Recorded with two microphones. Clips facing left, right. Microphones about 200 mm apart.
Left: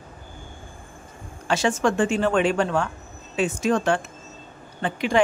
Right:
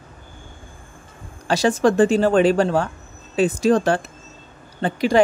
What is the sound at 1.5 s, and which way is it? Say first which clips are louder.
Speech: right 4 dB; 35° right (ahead or behind).